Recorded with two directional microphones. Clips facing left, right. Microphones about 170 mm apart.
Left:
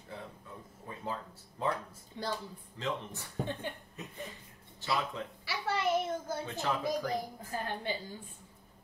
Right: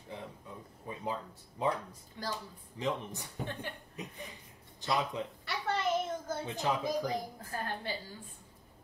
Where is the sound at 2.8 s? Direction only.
15° right (ahead or behind).